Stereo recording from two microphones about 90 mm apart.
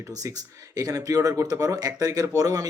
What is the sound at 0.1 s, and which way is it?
Speech, 40° right (ahead or behind).